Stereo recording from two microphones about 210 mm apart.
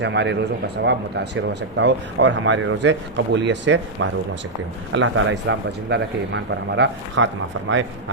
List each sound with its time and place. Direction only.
0.0 s speech: 55° right (ahead or behind)